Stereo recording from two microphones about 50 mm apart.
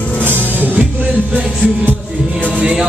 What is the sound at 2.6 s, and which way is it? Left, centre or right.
Music, right.